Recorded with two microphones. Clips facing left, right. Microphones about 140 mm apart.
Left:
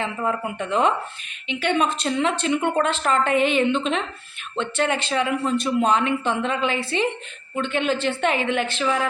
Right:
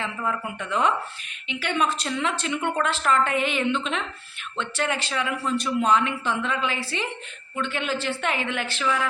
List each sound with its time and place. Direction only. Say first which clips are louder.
0.0 s a man's voice: left 4 dB; 25° left (ahead or behind)